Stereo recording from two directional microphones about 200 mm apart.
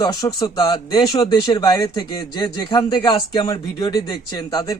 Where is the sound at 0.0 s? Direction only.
20° left (ahead or behind).